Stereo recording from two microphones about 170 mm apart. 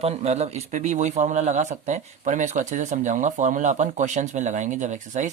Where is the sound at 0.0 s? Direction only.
40° right (ahead or behind).